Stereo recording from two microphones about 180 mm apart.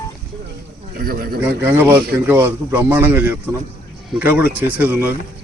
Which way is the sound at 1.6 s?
10° right (ahead or behind).